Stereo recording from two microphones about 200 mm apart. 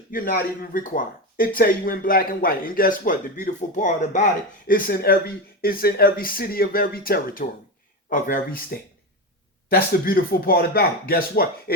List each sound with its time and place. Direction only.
0.1 s speech: 45° left (ahead or behind)
4.7 s speech: 50° left (ahead or behind)